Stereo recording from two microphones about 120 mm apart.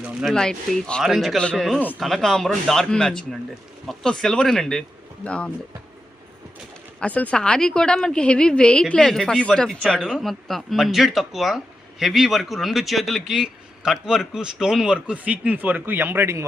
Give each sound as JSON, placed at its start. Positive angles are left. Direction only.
{"t": 0.0, "sound": "a woman's voice", "side_deg": 0}
{"t": 7.0, "sound": "a woman's voice", "side_deg": 10}